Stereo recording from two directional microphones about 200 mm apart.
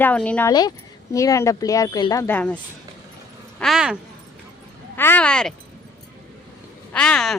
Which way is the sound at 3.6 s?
Centre (ahead or behind).